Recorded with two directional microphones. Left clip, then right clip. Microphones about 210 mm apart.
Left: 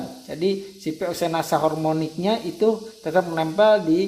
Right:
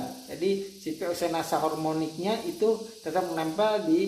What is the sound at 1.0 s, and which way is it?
Speech, 45° left (ahead or behind).